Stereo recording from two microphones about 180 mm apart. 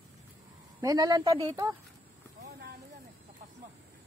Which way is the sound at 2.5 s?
65° right (ahead or behind).